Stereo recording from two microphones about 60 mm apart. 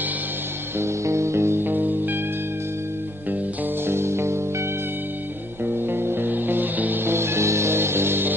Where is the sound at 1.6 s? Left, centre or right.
Right.